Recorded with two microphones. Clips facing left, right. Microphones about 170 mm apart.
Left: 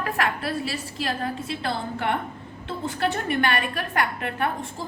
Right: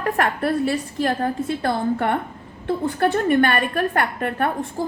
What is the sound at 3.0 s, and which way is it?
A woman's voice, 45° right (ahead or behind).